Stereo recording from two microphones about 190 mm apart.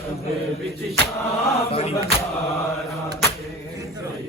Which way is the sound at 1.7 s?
30° left (ahead or behind).